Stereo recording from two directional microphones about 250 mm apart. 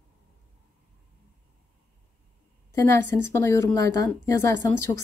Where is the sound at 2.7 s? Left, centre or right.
Centre.